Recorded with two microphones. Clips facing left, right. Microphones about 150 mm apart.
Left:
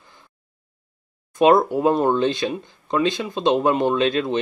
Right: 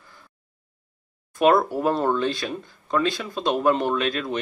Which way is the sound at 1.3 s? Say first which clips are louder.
Left 3 dB; 20° left (ahead or behind).